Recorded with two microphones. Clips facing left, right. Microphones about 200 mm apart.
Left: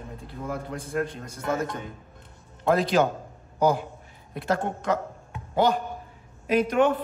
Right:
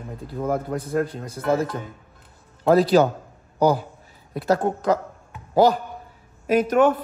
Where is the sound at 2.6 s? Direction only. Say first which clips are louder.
Right 5 dB; 35° right (ahead or behind).